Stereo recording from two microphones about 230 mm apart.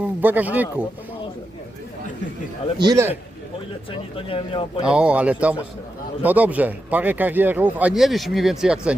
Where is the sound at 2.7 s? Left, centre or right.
Centre.